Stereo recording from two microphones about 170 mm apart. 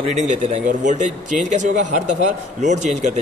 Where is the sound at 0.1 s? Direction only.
45° right (ahead or behind).